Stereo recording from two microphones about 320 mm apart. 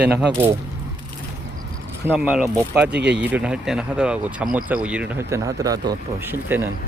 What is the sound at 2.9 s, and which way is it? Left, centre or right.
Speech, right.